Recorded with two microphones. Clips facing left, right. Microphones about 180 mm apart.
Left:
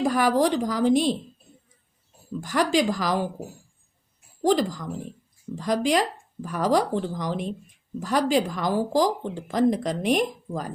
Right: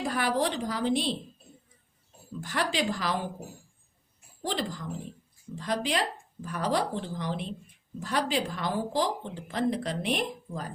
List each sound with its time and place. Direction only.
0.0 s speech: 45° left (ahead or behind)
2.4 s speech: 45° left (ahead or behind)
4.4 s speech: 45° left (ahead or behind)